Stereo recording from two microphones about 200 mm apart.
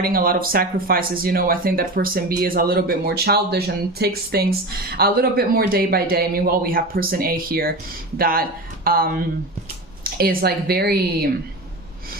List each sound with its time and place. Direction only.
0.0 s speech: 45° right (ahead or behind)